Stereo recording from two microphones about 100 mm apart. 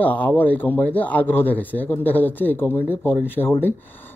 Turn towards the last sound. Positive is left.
turn(degrees=20)  # may be behind; listen again after turning